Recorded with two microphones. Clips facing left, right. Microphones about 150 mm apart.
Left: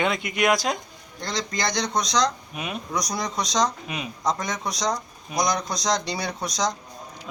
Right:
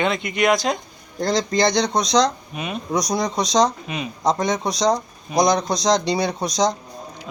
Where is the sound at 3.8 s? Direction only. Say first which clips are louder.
Right 4 dB; 5° left (ahead or behind).